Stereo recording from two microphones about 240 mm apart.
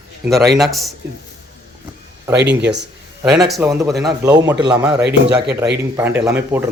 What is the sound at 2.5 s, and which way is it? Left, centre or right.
Speech, right.